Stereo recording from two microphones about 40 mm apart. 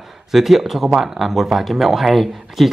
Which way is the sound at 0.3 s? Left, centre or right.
Centre.